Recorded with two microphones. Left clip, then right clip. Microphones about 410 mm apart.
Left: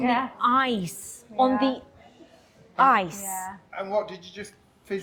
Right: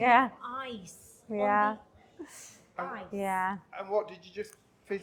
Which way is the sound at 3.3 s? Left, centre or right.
Right.